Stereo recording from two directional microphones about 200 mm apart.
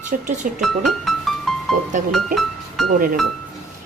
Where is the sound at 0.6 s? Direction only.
Centre (ahead or behind).